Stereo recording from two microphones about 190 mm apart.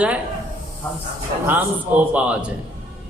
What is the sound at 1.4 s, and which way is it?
A man's voice, 10° right (ahead or behind).